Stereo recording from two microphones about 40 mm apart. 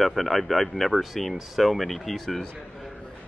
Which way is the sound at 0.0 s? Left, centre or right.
Centre.